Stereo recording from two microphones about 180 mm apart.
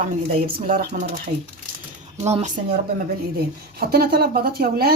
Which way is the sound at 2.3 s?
35° right (ahead or behind).